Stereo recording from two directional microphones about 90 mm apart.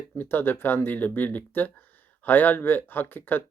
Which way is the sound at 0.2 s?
25° left (ahead or behind).